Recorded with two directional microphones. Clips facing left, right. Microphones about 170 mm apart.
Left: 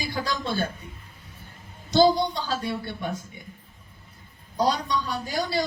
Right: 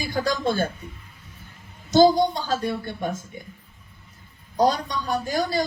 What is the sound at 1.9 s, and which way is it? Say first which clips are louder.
Speech: right 3 dB; 45° right (ahead or behind).